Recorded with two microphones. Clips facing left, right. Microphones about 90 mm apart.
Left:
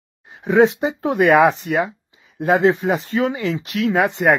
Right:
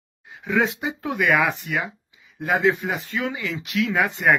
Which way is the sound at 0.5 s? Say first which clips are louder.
Left 8 dB; 30° left (ahead or behind).